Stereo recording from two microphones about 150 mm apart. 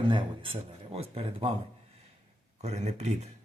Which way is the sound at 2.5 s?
50° right (ahead or behind).